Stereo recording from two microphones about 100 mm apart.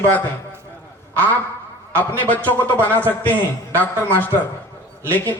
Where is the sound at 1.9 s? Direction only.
20° left (ahead or behind).